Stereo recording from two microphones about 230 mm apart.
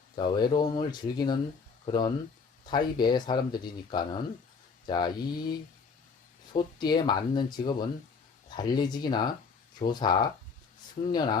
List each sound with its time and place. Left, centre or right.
0.2 s speech: centre